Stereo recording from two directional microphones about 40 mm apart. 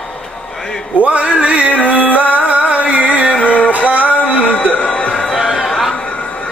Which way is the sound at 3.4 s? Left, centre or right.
Left.